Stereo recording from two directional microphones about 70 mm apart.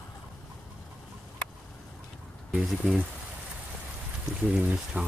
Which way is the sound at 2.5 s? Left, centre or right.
Centre.